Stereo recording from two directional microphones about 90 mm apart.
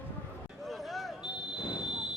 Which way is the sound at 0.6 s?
Centre (ahead or behind).